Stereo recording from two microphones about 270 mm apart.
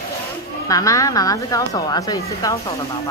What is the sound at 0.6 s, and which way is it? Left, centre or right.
Speech, centre.